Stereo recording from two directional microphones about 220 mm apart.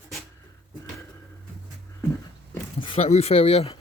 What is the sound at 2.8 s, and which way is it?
Speech, 25° left (ahead or behind).